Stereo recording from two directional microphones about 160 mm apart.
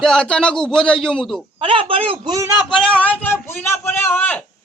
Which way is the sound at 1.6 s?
35° right (ahead or behind).